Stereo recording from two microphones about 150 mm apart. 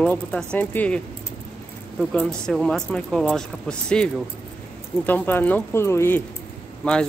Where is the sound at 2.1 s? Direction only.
5° left (ahead or behind).